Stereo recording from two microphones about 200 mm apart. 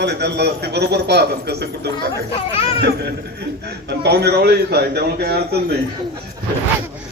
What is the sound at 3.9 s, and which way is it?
A man's voice, 55° right (ahead or behind).